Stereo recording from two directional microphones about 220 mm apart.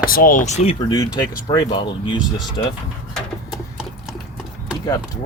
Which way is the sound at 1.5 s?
20° left (ahead or behind).